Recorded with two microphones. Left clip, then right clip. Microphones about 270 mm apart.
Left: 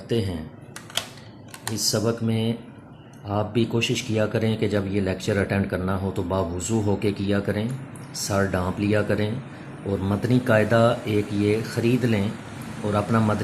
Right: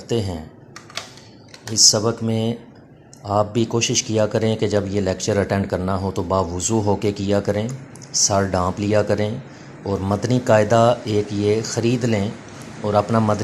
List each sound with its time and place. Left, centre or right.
0.1 s speech: right
1.9 s a man's voice: right